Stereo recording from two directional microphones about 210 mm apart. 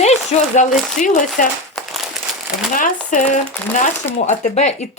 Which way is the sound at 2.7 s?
35° left (ahead or behind).